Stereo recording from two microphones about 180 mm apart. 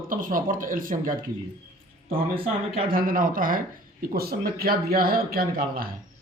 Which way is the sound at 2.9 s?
50° right (ahead or behind).